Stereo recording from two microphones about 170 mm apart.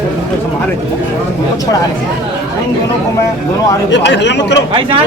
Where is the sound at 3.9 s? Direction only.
90° left.